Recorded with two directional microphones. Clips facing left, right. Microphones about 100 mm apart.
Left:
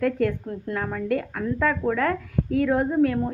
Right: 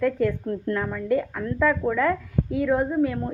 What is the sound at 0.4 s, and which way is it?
A woman's voice, 10° left (ahead or behind).